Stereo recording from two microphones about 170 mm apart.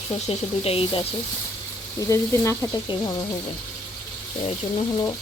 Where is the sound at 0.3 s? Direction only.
35° left (ahead or behind).